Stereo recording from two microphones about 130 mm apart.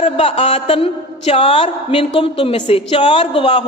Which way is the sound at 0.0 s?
50° left (ahead or behind).